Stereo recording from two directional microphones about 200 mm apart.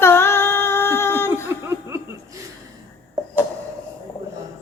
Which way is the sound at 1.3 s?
15° right (ahead or behind).